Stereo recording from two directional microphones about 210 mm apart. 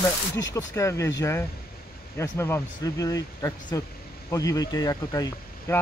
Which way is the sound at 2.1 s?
10° left (ahead or behind).